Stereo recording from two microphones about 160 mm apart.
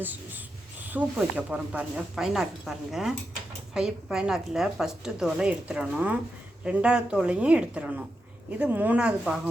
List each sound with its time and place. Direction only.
0.0 s a woman's voice: 10° right (ahead or behind)